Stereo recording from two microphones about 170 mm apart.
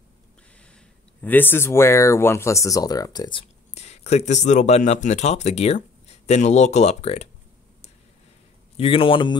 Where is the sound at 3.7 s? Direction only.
40° left (ahead or behind).